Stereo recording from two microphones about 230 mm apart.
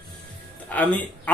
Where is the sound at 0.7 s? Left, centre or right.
Centre.